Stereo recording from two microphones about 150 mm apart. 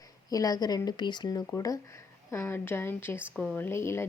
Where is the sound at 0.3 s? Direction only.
25° left (ahead or behind).